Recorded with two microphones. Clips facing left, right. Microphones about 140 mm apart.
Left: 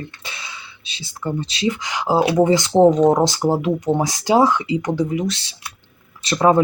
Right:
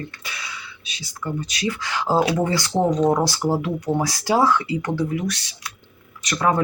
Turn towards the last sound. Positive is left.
turn(degrees=25)  # may be behind; listen again after turning